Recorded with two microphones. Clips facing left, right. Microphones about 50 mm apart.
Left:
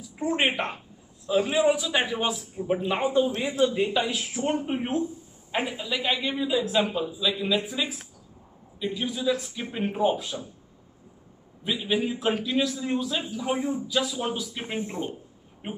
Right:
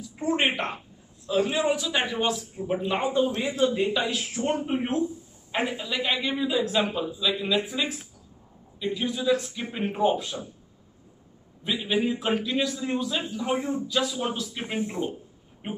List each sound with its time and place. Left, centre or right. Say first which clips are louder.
0.1 s a woman's voice: even; centre
1.9 s speech: left 1 dB; centre
2.1 s a man's voice: right 1 dB; centre
11.6 s a man's voice: right 1 dB; centre